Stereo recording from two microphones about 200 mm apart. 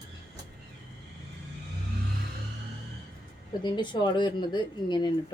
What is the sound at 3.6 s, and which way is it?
Speech, 20° left (ahead or behind).